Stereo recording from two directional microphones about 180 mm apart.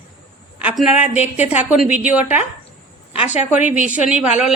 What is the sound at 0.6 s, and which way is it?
A woman's voice, 5° right (ahead or behind).